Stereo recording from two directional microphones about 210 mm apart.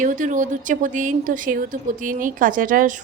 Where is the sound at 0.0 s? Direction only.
35° right (ahead or behind).